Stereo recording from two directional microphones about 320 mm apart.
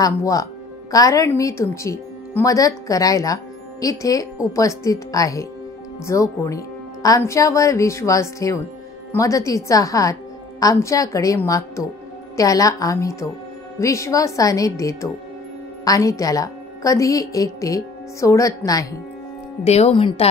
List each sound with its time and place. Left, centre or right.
0.0 s a woman's voice: centre